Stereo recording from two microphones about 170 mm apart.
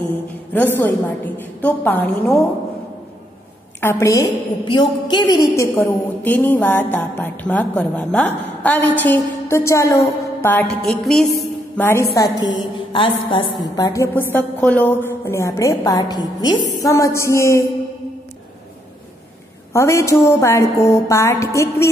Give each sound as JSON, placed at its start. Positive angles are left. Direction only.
{"t": 0.5, "sound": "a woman's voice", "side_deg": 10}
{"t": 3.8, "sound": "a woman's voice", "side_deg": 20}
{"t": 11.8, "sound": "a woman's voice", "side_deg": 15}
{"t": 19.7, "sound": "a woman's voice", "side_deg": 15}